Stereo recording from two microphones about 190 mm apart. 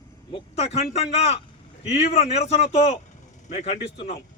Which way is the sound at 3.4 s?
40° left (ahead or behind).